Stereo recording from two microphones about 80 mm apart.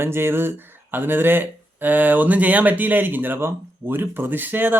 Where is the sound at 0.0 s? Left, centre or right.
Right.